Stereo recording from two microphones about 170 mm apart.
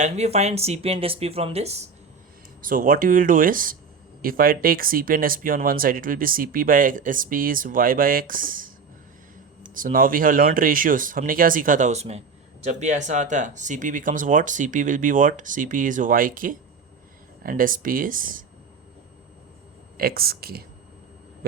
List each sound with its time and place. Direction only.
0.0 s speech: 40° right (ahead or behind)
2.6 s speech: 55° right (ahead or behind)
9.7 s speech: 55° right (ahead or behind)
20.0 s speech: 60° right (ahead or behind)